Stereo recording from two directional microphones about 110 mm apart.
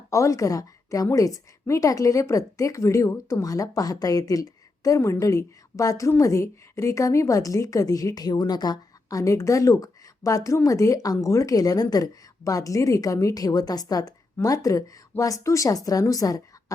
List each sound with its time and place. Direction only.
0.1 s a woman's voice: 30° left (ahead or behind)